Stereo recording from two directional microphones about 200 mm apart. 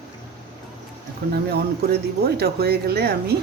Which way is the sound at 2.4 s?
50° right (ahead or behind).